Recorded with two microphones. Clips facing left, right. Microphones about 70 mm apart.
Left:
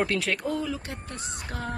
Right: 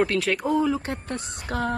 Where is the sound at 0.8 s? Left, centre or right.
Right.